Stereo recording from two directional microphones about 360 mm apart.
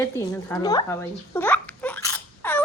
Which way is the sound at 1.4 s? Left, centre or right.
Centre.